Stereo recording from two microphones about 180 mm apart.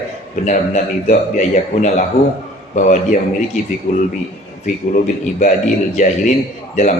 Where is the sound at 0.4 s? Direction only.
40° left (ahead or behind).